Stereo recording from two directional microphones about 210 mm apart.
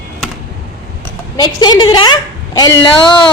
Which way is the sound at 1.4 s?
20° left (ahead or behind).